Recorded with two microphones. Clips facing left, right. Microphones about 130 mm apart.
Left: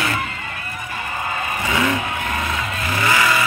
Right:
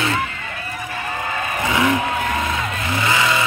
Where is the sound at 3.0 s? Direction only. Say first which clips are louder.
Left 1 dB; 20° right (ahead or behind).